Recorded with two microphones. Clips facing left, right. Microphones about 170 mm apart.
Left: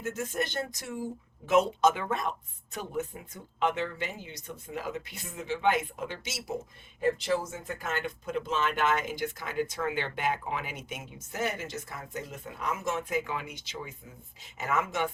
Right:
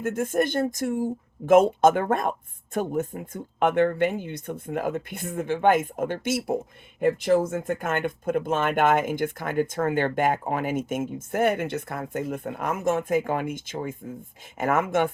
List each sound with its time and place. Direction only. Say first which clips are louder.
0.0 s speech: right 9 dB; 55° right (ahead or behind)